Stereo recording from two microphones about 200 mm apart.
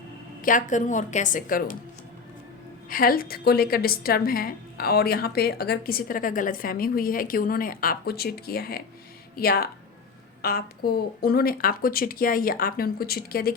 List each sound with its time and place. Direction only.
0.4 s a woman's voice: 40° left (ahead or behind)
2.9 s a woman's voice: 45° left (ahead or behind)